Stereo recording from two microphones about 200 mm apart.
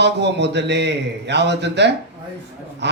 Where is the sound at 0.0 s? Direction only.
60° right (ahead or behind).